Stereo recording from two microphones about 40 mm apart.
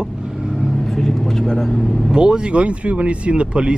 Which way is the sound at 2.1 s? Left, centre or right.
Right.